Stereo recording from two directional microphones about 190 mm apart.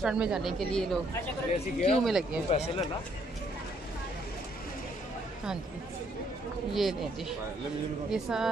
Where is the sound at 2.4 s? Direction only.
35° left (ahead or behind).